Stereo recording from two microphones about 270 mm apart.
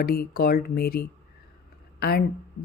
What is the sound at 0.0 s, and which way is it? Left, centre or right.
A woman's voice, left.